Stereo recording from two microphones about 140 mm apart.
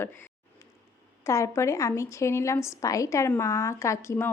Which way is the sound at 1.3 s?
20° left (ahead or behind).